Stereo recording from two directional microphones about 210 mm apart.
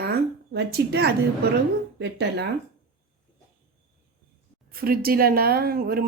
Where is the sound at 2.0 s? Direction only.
55° right (ahead or behind).